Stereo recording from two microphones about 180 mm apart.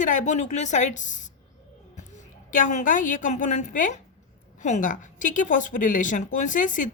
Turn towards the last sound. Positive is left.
turn(degrees=45)  # may be behind; listen again after turning